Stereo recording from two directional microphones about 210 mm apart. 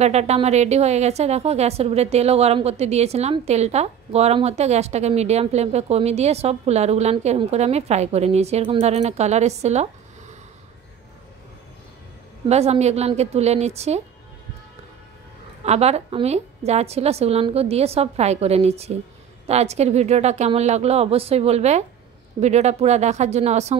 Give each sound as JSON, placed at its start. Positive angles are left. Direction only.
{"t": 0.0, "sound": "a woman's voice", "side_deg": -30}
{"t": 12.4, "sound": "a woman's voice", "side_deg": -30}
{"t": 15.6, "sound": "a woman's voice", "side_deg": -30}